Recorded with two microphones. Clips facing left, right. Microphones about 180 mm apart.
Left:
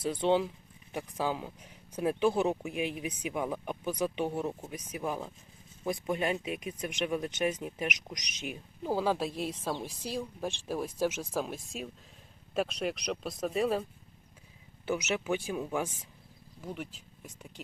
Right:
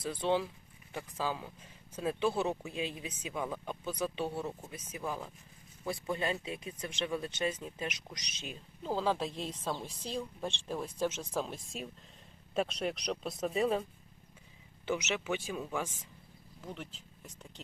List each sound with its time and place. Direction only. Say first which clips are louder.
0.0 s speech: left 4 dB; 20° left (ahead or behind); by 13.8 s centre (ahead or behind)
14.8 s speech: left 3 dB; 10° left (ahead or behind)